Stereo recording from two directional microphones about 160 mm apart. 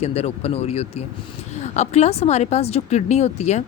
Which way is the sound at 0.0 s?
40° left (ahead or behind).